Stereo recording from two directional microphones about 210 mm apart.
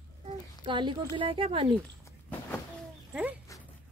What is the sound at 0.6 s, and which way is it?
Speech, 20° right (ahead or behind).